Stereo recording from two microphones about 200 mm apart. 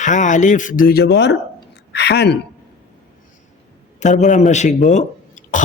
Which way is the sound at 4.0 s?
35° left (ahead or behind).